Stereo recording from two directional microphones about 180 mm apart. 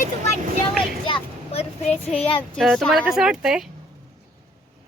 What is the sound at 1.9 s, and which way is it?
A child's voice, 10° left (ahead or behind).